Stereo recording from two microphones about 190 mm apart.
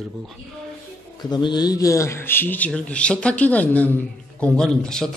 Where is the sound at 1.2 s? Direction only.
20° left (ahead or behind).